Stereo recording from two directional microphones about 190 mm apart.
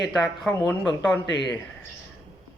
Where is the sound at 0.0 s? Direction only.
Centre (ahead or behind).